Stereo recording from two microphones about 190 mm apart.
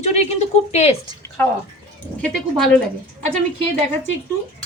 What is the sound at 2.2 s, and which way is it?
Speech, 5° left (ahead or behind).